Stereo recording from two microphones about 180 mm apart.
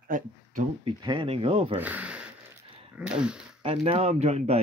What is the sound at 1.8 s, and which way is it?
Speech, 10° right (ahead or behind).